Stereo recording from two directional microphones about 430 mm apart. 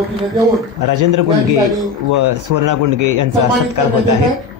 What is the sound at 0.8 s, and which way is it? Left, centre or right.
A man's voice, right.